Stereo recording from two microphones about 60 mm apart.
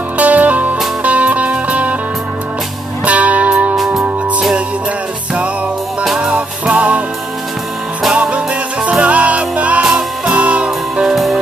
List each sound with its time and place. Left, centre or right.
0.2 s music: right
3.1 s music: right
3.7 s music: centre
6.0 s music: centre
6.3 s music: right
8.1 s music: centre